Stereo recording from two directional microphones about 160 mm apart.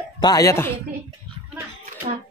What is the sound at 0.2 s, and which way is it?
Speech, 20° left (ahead or behind).